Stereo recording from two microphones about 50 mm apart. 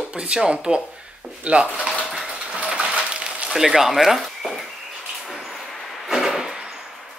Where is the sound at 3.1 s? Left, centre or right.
Right.